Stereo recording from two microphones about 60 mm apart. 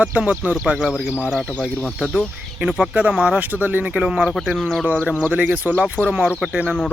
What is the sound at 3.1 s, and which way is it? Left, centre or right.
Speech, centre.